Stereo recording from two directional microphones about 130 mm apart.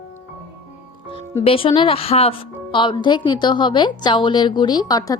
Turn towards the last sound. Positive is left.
turn(degrees=30)  # may be behind; listen again after turning